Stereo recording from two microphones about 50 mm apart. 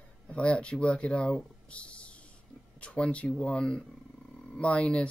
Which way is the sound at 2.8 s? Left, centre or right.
Left.